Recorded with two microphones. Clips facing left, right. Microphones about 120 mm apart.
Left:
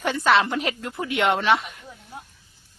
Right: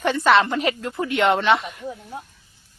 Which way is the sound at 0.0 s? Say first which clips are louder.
Right 3 dB; centre (ahead or behind).